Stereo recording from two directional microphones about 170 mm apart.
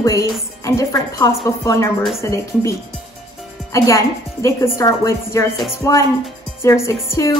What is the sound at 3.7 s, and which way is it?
A woman's voice, 15° left (ahead or behind).